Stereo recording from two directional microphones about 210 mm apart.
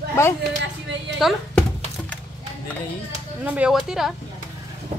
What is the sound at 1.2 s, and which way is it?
Speech, centre (ahead or behind).